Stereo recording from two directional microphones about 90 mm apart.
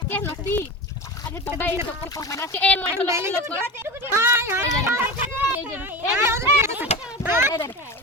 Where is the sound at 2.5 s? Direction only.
15° left (ahead or behind).